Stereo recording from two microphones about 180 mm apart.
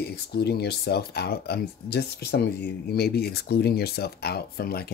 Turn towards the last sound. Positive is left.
turn(degrees=60)  # may be behind; listen again after turning